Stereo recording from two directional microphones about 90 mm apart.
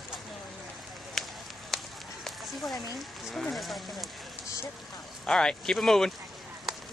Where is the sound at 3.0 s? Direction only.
Centre (ahead or behind).